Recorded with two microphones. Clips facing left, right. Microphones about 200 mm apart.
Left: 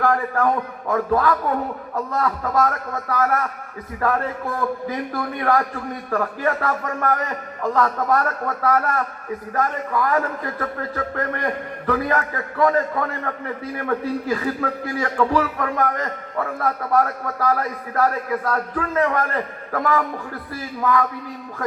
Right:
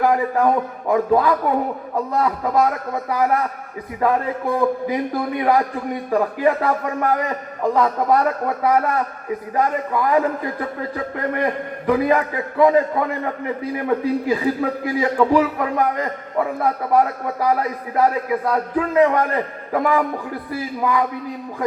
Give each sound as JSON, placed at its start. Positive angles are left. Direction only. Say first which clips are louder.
{"t": 0.0, "sound": "a man's voice", "louder": "right 3 dB", "side_deg": -15}